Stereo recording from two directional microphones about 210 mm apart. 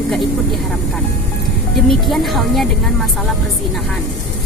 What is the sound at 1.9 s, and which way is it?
Speech, centre (ahead or behind).